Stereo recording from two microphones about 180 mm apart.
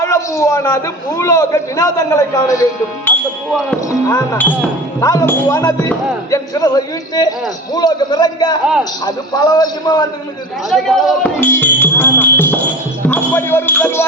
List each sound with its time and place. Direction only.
0.0 s a man's voice: 15° left (ahead or behind)
10.7 s speech: centre (ahead or behind)
11.3 s music: 10° left (ahead or behind)
13.1 s speech: 10° left (ahead or behind)